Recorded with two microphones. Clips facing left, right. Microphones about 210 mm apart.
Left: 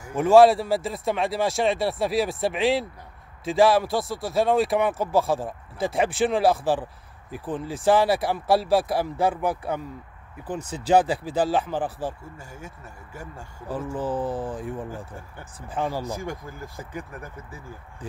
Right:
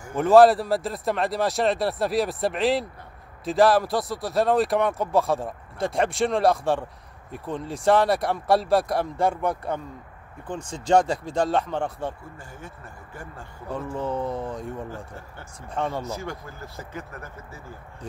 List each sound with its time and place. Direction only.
0.1 s speech: centre (ahead or behind)
15.7 s speech: centre (ahead or behind)
16.1 s speech: 15° left (ahead or behind)